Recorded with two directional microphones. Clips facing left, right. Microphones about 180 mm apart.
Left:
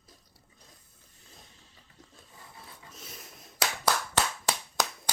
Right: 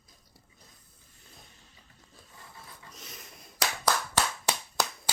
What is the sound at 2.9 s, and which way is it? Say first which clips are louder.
Finger snapping: left 1 dB; 5° left (ahead or behind).